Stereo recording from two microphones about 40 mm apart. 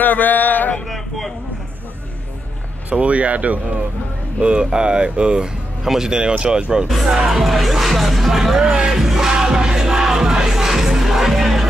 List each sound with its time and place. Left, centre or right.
0.0 s male singing: left
0.8 s a sound: centre
2.9 s speech: right
4.4 s speech: right; by 8.6 s centre
8.6 s speech: centre
9.0 s music: centre